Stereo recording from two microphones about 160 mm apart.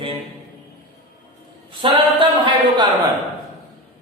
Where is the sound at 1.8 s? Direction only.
35° right (ahead or behind).